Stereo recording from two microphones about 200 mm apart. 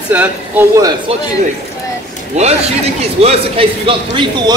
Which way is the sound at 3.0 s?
30° right (ahead or behind).